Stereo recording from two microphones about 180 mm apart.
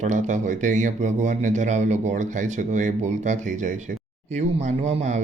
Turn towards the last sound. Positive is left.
turn(degrees=-40)  # may be behind; listen again after turning